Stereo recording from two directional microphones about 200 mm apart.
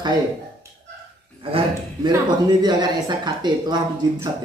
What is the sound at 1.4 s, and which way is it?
Speech, 25° right (ahead or behind).